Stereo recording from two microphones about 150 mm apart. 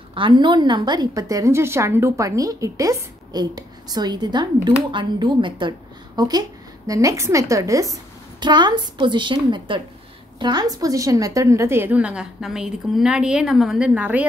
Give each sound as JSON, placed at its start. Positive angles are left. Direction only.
{"t": 0.1, "sound": "a woman's voice", "side_deg": -35}